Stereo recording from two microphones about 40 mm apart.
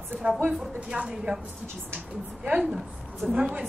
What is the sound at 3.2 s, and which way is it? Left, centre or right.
Speech, right.